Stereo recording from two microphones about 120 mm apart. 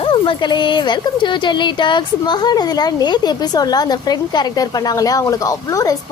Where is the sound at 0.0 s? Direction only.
45° left (ahead or behind).